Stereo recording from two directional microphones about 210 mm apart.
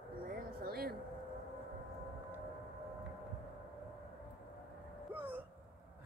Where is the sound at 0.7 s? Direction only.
45° right (ahead or behind).